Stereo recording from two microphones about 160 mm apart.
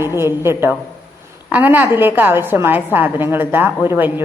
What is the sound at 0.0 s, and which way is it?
A woman's voice, 15° right (ahead or behind).